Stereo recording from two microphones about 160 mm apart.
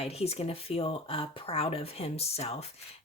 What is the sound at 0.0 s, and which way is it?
Speech, 40° left (ahead or behind).